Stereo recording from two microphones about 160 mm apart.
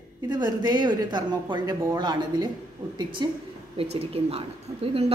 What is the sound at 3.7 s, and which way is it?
Speech, 40° right (ahead or behind).